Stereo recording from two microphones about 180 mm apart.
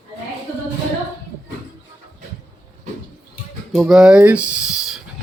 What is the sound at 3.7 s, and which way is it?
Speech, centre (ahead or behind).